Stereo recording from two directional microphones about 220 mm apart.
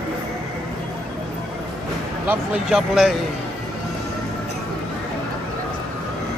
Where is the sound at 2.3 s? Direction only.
5° right (ahead or behind).